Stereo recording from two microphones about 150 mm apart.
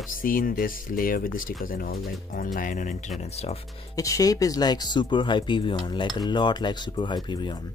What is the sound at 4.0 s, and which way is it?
Speech, 20° left (ahead or behind).